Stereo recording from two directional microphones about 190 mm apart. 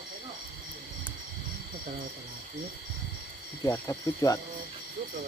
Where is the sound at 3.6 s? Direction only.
15° left (ahead or behind).